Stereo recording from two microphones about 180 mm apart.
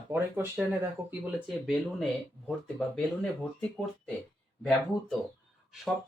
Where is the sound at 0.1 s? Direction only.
10° right (ahead or behind).